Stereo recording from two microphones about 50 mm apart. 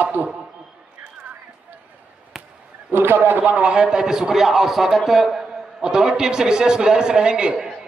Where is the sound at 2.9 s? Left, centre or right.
Right.